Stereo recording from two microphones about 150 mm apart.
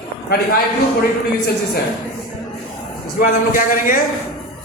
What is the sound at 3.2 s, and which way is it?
Speech, 65° left (ahead or behind).